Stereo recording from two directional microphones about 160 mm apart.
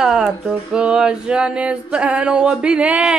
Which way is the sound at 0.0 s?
5° right (ahead or behind).